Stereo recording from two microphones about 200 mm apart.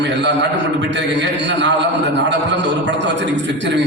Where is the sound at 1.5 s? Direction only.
65° right (ahead or behind).